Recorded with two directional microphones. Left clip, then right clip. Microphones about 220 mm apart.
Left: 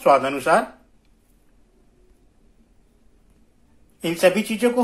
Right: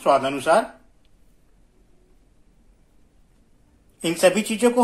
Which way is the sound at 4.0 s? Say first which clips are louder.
Even; centre (ahead or behind).